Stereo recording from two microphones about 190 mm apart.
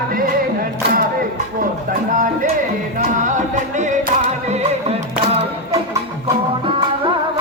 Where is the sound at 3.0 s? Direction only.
40° right (ahead or behind).